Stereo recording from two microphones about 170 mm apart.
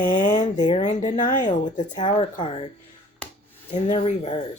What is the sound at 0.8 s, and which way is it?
Speech, 45° left (ahead or behind).